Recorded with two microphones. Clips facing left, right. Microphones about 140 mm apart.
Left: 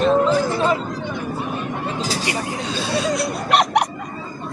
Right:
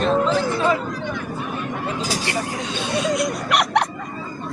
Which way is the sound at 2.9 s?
35° left (ahead or behind).